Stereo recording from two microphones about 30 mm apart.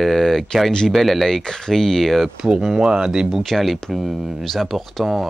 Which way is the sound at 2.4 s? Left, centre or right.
Right.